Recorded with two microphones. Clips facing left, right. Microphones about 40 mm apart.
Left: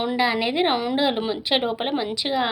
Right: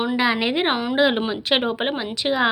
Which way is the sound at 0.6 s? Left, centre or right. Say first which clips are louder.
Even; right.